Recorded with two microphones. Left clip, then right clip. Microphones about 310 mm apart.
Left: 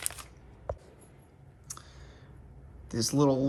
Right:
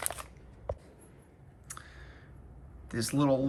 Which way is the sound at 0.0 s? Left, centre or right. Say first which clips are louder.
Right 2 dB; centre.